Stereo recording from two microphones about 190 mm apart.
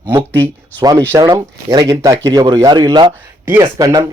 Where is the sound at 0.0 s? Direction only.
20° right (ahead or behind).